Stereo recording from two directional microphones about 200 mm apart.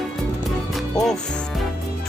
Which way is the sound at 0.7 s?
Centre (ahead or behind).